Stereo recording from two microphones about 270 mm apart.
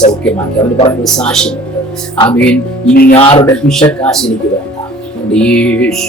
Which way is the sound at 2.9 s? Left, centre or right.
Left.